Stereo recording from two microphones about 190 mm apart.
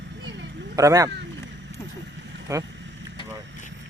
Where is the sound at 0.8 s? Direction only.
15° right (ahead or behind).